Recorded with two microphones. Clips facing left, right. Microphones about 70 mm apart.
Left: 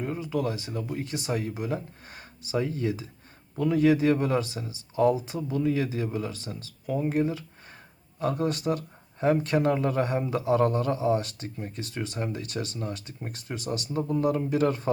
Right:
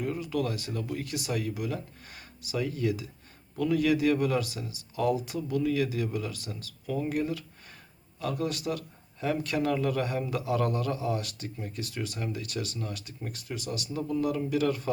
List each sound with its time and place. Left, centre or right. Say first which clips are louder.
0.0 s speech: left 1 dB; left